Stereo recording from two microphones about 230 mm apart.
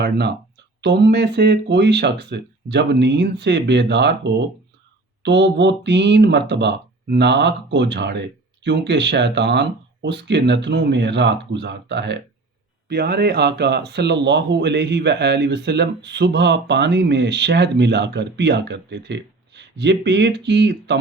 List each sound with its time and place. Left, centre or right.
0.8 s speech: right